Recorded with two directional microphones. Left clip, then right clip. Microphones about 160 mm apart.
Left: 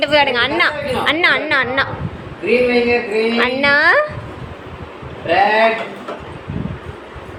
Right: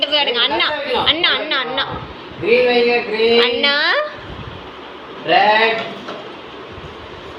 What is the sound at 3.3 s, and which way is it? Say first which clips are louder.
Speech: left 2 dB; 30° left (ahead or behind).